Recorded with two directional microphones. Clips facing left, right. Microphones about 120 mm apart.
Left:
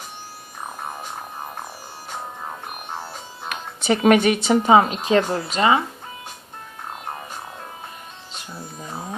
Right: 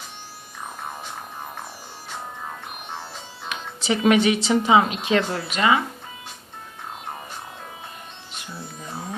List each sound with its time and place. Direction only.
3.5 s speech: 55° left (ahead or behind); by 5.8 s 30° left (ahead or behind)